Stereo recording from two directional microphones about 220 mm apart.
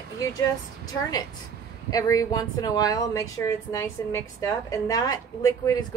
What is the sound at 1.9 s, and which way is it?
A woman's voice, 15° left (ahead or behind).